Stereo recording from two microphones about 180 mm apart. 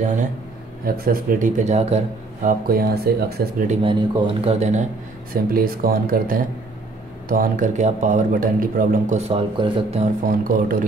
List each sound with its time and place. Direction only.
0.8 s a man's voice: 55° right (ahead or behind); by 2.5 s 35° right (ahead or behind)
2.7 s speech: 60° right (ahead or behind)
3.8 s speech: 25° right (ahead or behind)
5.3 s a man's voice: 55° right (ahead or behind)
9.3 s speech: 35° right (ahead or behind)
10.2 s a man's voice: 50° right (ahead or behind)